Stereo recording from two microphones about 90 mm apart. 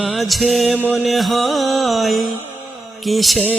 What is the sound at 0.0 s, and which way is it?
Music, centre (ahead or behind).